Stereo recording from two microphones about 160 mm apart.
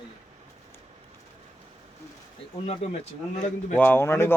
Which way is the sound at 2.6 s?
40° left (ahead or behind).